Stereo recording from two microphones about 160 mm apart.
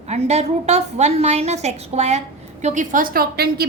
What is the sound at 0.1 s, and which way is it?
A woman's voice, 45° right (ahead or behind).